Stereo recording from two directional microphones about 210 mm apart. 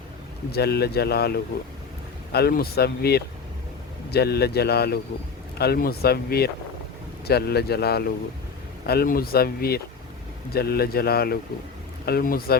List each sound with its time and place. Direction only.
0.5 s speech: 50° left (ahead or behind)